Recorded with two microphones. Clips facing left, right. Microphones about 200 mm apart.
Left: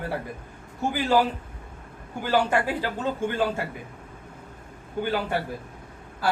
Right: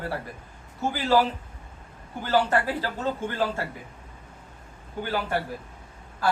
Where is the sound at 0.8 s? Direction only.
15° left (ahead or behind).